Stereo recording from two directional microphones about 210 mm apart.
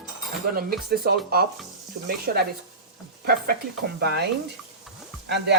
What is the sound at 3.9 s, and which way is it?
Speech, 50° right (ahead or behind).